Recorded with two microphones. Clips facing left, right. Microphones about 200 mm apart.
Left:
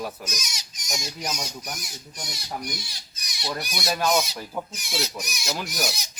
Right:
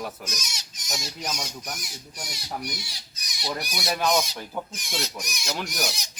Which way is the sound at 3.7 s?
Centre (ahead or behind).